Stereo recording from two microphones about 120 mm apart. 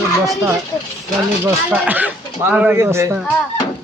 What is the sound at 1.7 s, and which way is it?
Speech, 15° right (ahead or behind).